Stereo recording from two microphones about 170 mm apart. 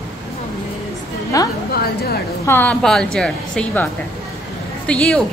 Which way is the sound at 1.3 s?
20° left (ahead or behind).